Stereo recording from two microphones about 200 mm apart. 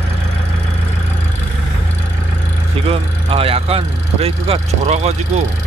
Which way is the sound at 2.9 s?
30° right (ahead or behind).